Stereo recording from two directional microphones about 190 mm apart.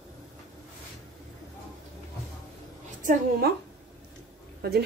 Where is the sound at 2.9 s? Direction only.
45° right (ahead or behind).